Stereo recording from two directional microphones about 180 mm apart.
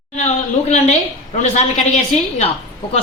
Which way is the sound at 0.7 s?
40° left (ahead or behind).